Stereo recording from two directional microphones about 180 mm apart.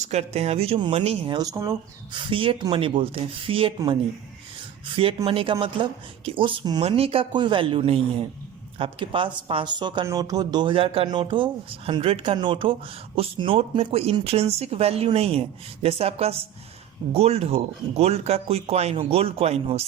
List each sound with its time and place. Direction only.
0.0 s speech: 40° right (ahead or behind); by 1.7 s 20° right (ahead or behind)
2.3 s speech: 30° right (ahead or behind)
4.9 s speech: 30° right (ahead or behind)